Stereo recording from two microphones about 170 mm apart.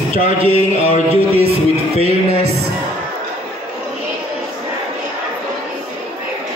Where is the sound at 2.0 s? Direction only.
35° right (ahead or behind).